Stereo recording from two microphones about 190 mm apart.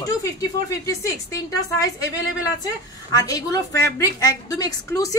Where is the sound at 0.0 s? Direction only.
20° left (ahead or behind).